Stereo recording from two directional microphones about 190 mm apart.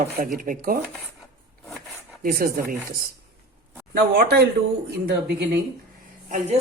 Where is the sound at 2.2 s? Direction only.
50° right (ahead or behind).